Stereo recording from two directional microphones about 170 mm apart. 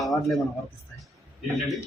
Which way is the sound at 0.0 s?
Centre (ahead or behind).